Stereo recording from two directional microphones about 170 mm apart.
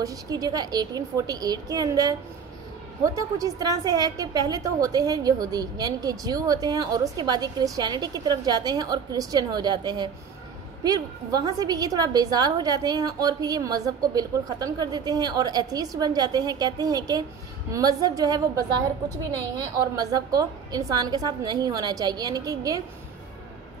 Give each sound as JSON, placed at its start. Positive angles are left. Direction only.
{"t": 0.0, "sound": "a woman's voice", "side_deg": -20}